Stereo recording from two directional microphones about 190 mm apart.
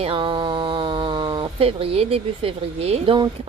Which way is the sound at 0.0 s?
25° right (ahead or behind).